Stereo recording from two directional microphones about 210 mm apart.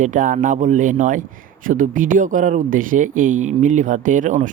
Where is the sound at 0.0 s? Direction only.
40° right (ahead or behind).